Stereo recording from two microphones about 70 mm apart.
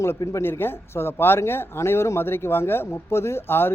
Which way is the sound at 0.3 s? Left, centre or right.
Left.